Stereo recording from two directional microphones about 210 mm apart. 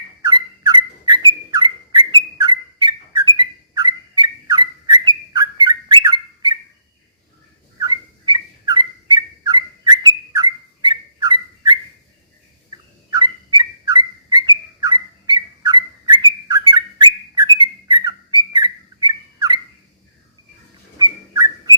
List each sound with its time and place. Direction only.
0.2 s bird: 20° right (ahead or behind)
7.8 s turkey: 20° right (ahead or behind)
12.7 s bird: 20° right (ahead or behind)
21.0 s whistling: 20° right (ahead or behind)